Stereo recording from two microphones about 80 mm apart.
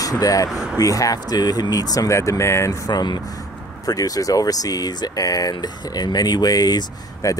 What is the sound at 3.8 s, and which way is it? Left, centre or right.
Speech, left.